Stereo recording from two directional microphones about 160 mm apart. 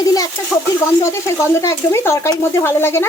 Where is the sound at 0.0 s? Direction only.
20° left (ahead or behind).